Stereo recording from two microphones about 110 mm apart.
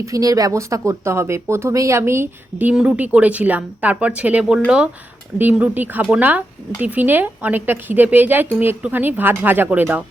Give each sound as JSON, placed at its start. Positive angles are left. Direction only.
{"t": 0.0, "sound": "a woman's voice", "side_deg": -30}